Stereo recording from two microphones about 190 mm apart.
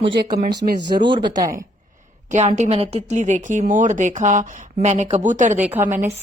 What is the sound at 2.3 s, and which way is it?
A woman's voice, 35° right (ahead or behind).